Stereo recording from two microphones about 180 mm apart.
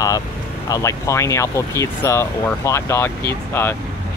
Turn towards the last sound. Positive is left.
turn(degrees=15)  # may be behind; listen again after turning